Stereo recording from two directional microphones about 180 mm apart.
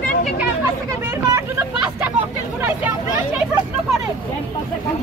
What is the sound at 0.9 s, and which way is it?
Vehicle, 15° right (ahead or behind).